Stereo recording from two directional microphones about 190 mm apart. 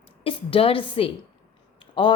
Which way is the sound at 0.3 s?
30° left (ahead or behind).